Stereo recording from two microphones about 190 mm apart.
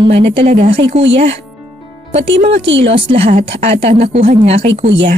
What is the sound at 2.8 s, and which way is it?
Speech, 30° right (ahead or behind).